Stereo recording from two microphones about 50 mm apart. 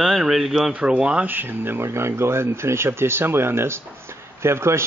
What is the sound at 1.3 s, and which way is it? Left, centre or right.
Speech, right.